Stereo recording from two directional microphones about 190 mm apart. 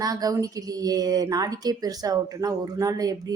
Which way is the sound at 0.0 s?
20° right (ahead or behind).